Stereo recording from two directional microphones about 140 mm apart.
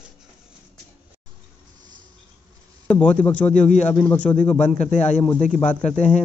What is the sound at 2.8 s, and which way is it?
Speech, 10° left (ahead or behind).